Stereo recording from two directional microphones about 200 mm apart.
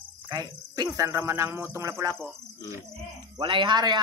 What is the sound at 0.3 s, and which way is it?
Speech, 20° right (ahead or behind).